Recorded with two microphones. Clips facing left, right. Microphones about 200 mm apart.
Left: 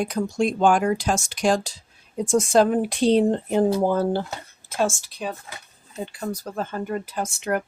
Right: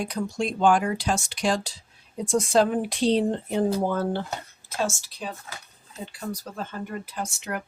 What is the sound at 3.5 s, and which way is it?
Speech, 35° left (ahead or behind).